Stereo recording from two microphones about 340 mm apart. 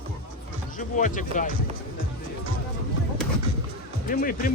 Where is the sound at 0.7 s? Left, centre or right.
Left.